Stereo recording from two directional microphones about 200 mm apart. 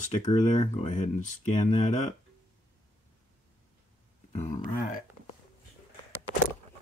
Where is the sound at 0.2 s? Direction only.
25° left (ahead or behind).